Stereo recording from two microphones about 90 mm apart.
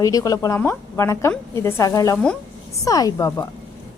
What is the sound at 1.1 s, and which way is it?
Speech, 35° left (ahead or behind).